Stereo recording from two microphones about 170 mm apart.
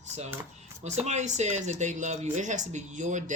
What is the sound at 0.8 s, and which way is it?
Speech, 40° right (ahead or behind).